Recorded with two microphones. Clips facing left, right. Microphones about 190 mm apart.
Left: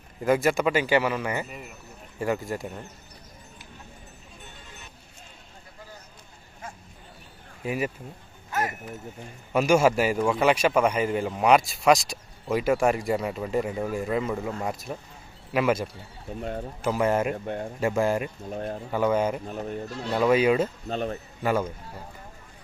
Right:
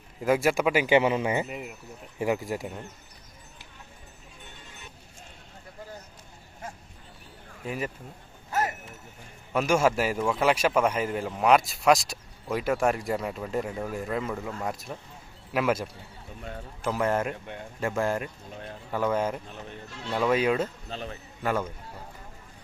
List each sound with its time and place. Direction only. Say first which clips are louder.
0.2 s a man's voice: left 1 dB; 5° right (ahead or behind)
7.6 s speech: left 4 dB; 10° left (ahead or behind)
8.4 s speech: even; 30° right (ahead or behind)
9.5 s a man's voice: left 3 dB; 5° left (ahead or behind)
16.4 s speech: left 8 dB; 40° left (ahead or behind)
16.8 s a man's voice: left 3 dB; 5° left (ahead or behind)
17.3 s speech: left 9 dB; 45° left (ahead or behind)
17.7 s speech: left 3 dB; 10° left (ahead or behind)
18.5 s speech: left 9 dB; 40° left (ahead or behind)
18.9 s a man's voice: left 3 dB; 5° left (ahead or behind)
19.5 s speech: left 9 dB; 45° left (ahead or behind)
20.1 s a man's voice: left 3 dB; 5° left (ahead or behind)
20.8 s speech: left 8 dB; 45° left (ahead or behind)
21.4 s a man's voice: left 3 dB; 5° left (ahead or behind)